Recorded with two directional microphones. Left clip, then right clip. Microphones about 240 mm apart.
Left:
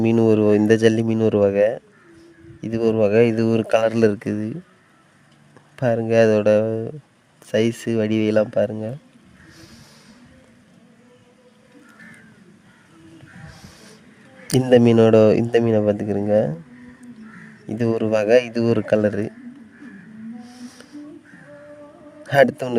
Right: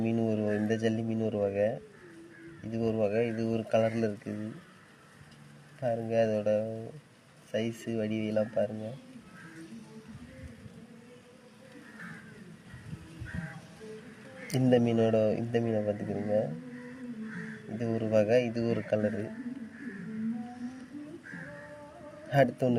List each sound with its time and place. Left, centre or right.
0.0 s speech: left
5.8 s speech: left
14.4 s speech: left
17.7 s speech: left
22.3 s speech: left